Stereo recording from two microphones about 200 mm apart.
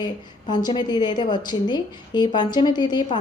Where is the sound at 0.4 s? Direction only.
20° left (ahead or behind).